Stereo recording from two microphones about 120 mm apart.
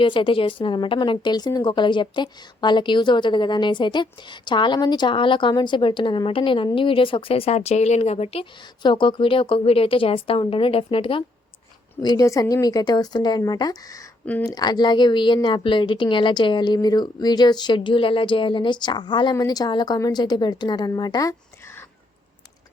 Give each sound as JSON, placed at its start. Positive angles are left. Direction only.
{"t": 0.0, "sound": "speech", "side_deg": 45}
{"t": 8.8, "sound": "a woman's voice", "side_deg": 45}
{"t": 12.2, "sound": "speech", "side_deg": 30}